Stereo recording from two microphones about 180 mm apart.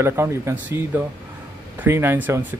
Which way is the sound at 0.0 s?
15° right (ahead or behind).